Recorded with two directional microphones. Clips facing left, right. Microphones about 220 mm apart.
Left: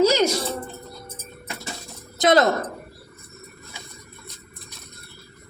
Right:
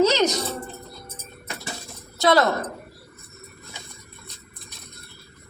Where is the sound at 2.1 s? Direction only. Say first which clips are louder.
Left 1 dB; 20° left (ahead or behind).